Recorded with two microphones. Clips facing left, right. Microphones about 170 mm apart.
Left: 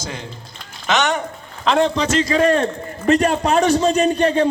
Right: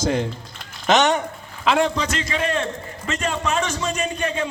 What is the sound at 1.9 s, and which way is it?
A man's voice, 25° left (ahead or behind).